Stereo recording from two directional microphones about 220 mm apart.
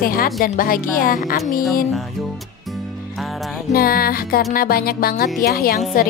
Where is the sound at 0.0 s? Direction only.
40° left (ahead or behind).